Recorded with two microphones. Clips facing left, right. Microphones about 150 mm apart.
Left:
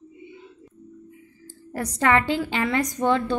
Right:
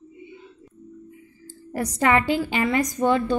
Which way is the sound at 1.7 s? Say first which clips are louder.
Right 1 dB; 15° right (ahead or behind).